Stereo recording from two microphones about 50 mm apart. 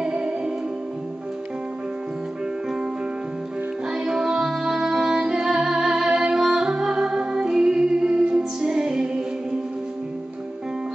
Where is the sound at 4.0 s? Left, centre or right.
Centre.